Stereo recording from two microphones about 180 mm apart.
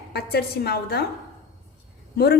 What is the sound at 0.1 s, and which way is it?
Speech, 60° left (ahead or behind).